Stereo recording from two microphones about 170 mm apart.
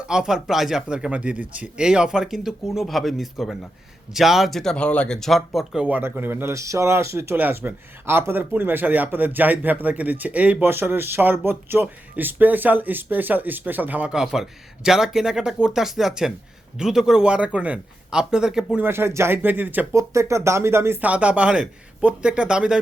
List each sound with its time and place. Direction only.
0.0 s a man's voice: 5° right (ahead or behind)